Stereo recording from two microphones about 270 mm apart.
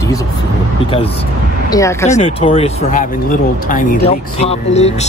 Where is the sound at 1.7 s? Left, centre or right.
Centre.